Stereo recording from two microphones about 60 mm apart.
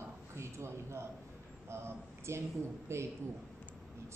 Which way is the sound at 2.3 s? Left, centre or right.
Right.